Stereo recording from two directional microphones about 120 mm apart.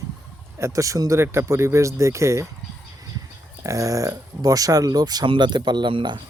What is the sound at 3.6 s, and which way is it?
Speech, 25° right (ahead or behind).